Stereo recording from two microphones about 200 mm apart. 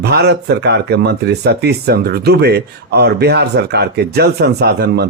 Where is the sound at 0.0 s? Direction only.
55° right (ahead or behind).